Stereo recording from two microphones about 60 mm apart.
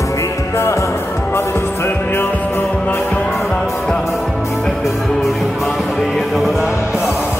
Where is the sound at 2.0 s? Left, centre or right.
Left.